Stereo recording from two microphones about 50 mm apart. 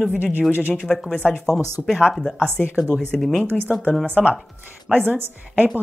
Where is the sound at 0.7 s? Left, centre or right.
Centre.